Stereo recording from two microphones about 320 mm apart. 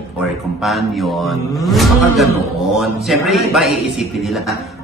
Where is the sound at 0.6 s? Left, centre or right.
Centre.